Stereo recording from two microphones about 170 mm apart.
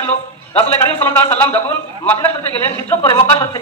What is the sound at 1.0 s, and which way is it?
A man's voice, 10° left (ahead or behind).